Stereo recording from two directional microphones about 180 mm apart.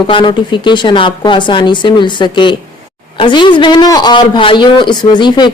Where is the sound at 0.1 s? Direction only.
25° left (ahead or behind).